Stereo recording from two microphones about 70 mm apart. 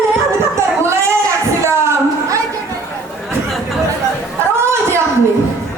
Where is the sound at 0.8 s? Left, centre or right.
Right.